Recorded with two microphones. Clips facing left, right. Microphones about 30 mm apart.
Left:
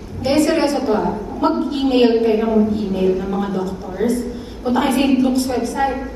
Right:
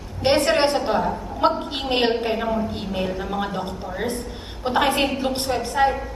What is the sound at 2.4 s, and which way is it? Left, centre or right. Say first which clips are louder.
Speech: left 7 dB; centre.